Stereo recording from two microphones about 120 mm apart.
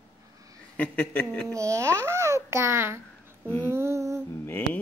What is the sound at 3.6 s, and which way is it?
Humming, 20° right (ahead or behind).